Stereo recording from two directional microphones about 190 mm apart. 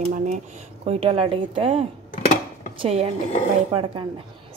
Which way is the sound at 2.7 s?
30° right (ahead or behind).